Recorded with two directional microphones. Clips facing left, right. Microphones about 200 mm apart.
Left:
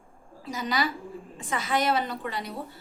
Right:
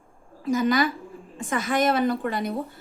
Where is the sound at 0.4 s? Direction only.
50° right (ahead or behind).